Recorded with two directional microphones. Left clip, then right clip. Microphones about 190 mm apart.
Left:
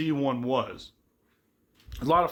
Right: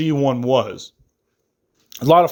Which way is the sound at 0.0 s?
35° right (ahead or behind).